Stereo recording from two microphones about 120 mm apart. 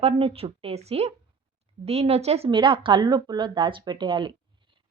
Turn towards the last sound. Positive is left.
turn(degrees=-45)  # may be behind; listen again after turning